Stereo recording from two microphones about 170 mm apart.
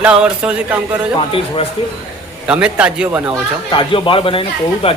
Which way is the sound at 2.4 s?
5° right (ahead or behind).